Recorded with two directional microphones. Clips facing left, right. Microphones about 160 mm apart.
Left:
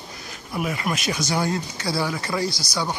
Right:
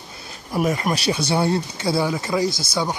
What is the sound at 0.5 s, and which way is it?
Speech, 40° right (ahead or behind).